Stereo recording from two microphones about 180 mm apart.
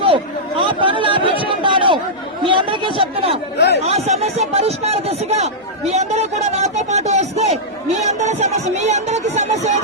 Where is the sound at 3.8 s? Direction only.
35° right (ahead or behind).